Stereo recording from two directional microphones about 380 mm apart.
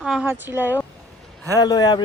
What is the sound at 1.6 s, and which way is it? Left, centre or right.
Speech, centre.